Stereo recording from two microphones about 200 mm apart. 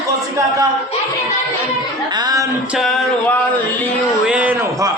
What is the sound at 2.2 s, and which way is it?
Speech, 20° right (ahead or behind).